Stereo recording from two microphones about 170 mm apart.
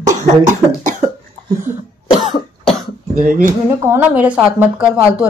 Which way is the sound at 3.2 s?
55° right (ahead or behind).